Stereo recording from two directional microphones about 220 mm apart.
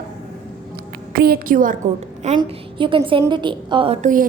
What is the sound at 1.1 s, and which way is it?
Speech, 45° right (ahead or behind).